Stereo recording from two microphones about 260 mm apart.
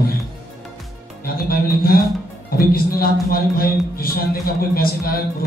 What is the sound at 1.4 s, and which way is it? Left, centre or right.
A man's voice, left.